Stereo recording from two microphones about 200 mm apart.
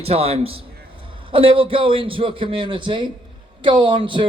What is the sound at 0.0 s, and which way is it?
A man's voice, 30° right (ahead or behind).